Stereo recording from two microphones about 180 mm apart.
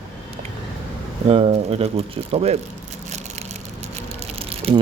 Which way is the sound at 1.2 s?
30° right (ahead or behind).